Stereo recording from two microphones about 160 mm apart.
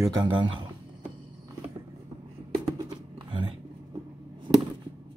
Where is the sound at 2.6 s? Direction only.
30° right (ahead or behind).